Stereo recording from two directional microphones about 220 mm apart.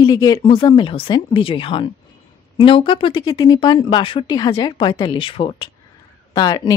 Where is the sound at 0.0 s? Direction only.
15° left (ahead or behind).